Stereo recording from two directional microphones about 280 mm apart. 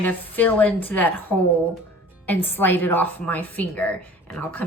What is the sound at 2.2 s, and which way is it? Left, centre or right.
A woman's voice, centre.